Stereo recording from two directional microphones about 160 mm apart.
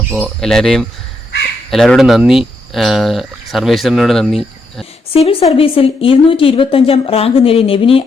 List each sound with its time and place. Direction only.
0.3 s speech: 5° left (ahead or behind)
5.1 s a woman's voice: 35° left (ahead or behind)